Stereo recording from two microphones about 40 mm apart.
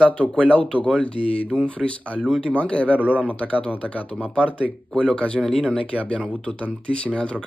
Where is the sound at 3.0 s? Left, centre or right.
Right.